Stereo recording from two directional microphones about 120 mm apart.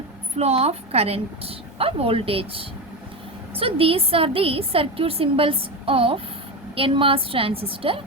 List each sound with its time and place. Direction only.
0.3 s a woman's voice: 60° right (ahead or behind)